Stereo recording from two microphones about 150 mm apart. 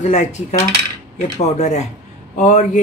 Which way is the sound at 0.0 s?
50° left (ahead or behind).